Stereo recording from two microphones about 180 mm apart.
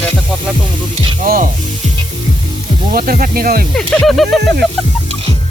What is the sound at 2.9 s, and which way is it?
Speech, 55° right (ahead or behind).